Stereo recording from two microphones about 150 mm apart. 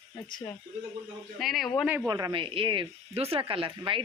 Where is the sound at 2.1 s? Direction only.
25° right (ahead or behind).